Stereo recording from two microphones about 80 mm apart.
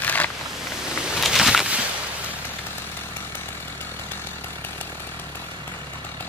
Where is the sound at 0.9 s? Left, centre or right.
Centre.